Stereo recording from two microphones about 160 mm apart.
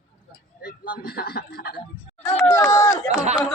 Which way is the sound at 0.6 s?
70° left (ahead or behind).